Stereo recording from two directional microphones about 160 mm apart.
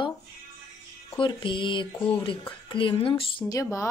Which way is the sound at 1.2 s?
30° left (ahead or behind).